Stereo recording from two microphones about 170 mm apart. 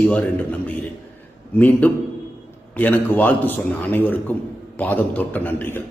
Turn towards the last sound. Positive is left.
turn(degrees=10)  # may be behind; listen again after turning